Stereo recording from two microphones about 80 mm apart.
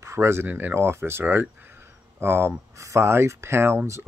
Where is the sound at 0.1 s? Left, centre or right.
Right.